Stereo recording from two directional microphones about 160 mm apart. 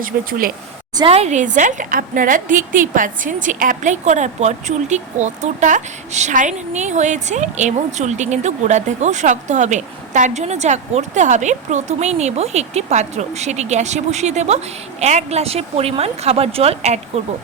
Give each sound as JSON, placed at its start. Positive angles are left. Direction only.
{"t": 0.0, "sound": "speech", "side_deg": -60}
{"t": 0.9, "sound": "a woman's voice", "side_deg": -35}